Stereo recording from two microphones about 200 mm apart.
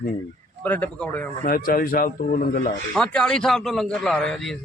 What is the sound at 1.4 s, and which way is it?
Speech, 45° left (ahead or behind).